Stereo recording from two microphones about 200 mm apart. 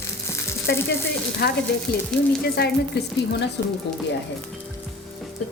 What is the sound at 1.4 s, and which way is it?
Speech, 50° left (ahead or behind).